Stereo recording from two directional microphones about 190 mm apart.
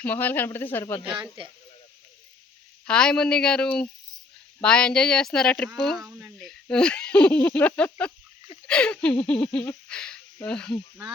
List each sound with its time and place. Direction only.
0.0 s speech: 10° left (ahead or behind)
1.1 s speech: 25° right (ahead or behind)
2.8 s speech: 5° left (ahead or behind)